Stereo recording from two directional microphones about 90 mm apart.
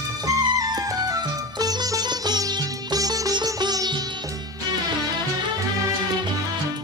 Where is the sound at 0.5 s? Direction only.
50° right (ahead or behind).